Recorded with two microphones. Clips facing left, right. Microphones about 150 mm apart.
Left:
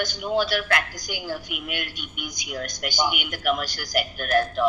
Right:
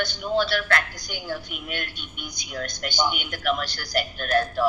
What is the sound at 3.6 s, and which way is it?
Speech, 45° left (ahead or behind).